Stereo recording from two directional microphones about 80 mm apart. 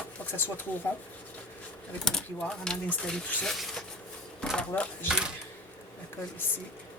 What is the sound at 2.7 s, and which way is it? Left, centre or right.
Speech, centre.